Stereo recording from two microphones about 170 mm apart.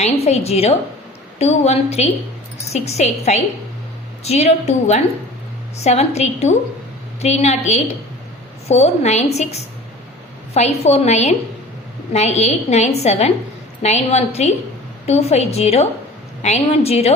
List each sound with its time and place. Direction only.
0.0 s a woman's voice: 40° left (ahead or behind)